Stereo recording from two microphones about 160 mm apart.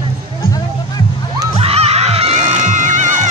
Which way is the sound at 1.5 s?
40° right (ahead or behind).